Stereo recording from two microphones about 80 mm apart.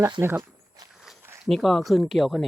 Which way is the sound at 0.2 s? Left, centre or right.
Right.